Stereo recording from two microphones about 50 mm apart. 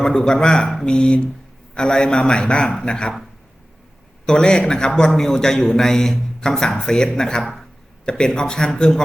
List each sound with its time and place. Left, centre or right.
0.0 s a man's voice: centre
4.3 s a man's voice: centre